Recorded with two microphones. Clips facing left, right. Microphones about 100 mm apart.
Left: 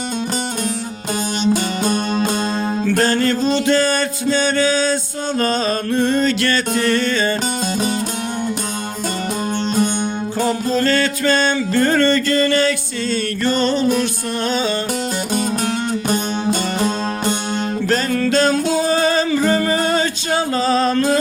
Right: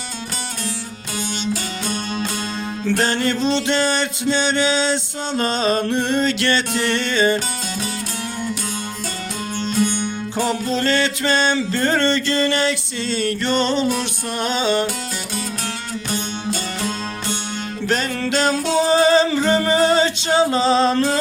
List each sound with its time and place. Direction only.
1.4 s music: 45° left (ahead or behind)
2.9 s music: 20° right (ahead or behind)
9.6 s music: 40° left (ahead or behind)
10.3 s music: 20° right (ahead or behind)
15.3 s music: 45° left (ahead or behind)
17.8 s music: 20° right (ahead or behind)